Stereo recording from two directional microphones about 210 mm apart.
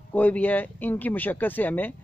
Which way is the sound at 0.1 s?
5° left (ahead or behind).